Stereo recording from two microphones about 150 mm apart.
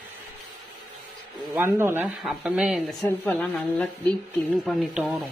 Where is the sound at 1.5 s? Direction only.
15° right (ahead or behind).